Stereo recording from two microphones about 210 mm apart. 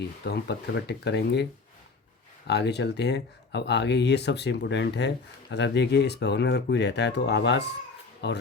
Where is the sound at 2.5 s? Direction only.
50° left (ahead or behind).